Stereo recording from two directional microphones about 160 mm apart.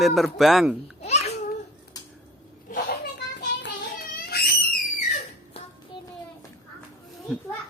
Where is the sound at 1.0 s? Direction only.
40° left (ahead or behind).